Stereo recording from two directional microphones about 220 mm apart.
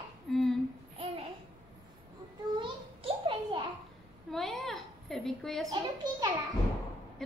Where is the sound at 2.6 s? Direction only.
20° right (ahead or behind).